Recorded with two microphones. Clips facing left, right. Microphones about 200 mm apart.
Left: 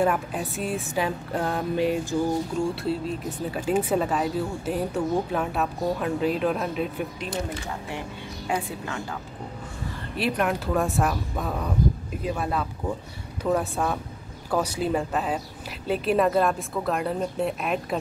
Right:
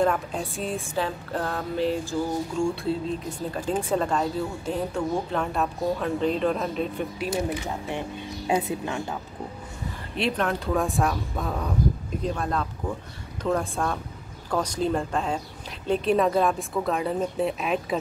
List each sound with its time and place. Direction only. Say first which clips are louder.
0.0 s speech: even; 5° left (ahead or behind)
0.9 s speech: left 2 dB; 15° left (ahead or behind)
2.7 s speech: even; 5° left (ahead or behind)
7.2 s a woman's voice: right 4 dB; 15° right (ahead or behind)
10.1 s speech: left 1 dB; 5° left (ahead or behind)